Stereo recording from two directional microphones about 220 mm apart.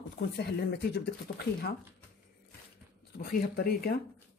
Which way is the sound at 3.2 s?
45° left (ahead or behind).